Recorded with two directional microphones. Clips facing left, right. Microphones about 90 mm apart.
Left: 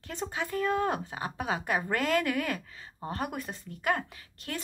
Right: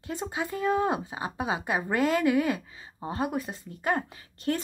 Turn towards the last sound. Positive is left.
turn(degrees=-30)  # may be behind; listen again after turning